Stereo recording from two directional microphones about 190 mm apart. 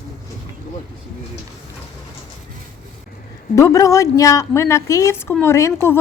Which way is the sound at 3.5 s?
15° left (ahead or behind).